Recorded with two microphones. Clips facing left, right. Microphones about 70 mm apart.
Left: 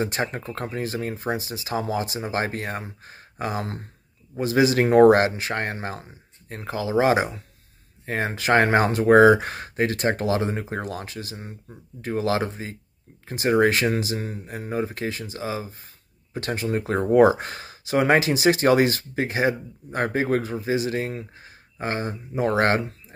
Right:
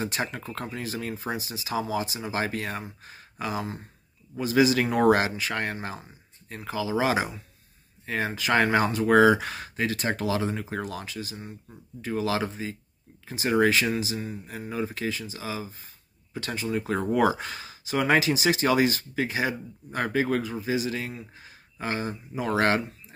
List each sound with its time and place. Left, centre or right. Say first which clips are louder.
0.0 s speech: left 4 dB; left
21.7 s speech: left 3 dB; left